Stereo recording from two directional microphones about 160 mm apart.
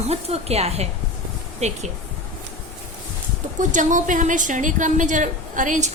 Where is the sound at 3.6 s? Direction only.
50° right (ahead or behind).